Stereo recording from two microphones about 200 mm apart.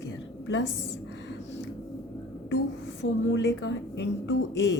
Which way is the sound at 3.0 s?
65° left (ahead or behind).